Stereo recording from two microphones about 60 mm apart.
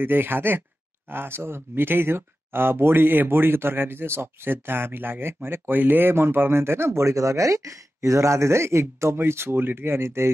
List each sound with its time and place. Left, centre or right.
0.0 s speech: right